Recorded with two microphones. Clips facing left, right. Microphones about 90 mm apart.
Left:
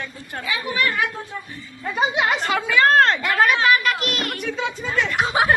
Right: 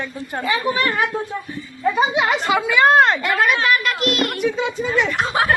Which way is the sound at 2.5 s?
15° right (ahead or behind).